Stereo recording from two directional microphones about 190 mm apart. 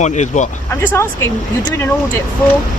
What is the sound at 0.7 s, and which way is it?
Speech, 15° left (ahead or behind).